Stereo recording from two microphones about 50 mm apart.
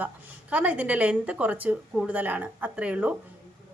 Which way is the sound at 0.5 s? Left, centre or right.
Right.